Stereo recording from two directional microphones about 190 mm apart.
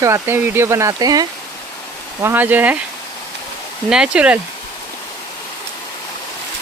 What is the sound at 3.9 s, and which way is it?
Speech, 5° right (ahead or behind).